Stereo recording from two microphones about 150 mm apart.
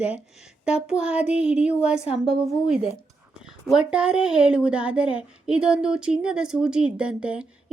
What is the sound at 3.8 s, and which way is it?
A woman's voice, 5° right (ahead or behind).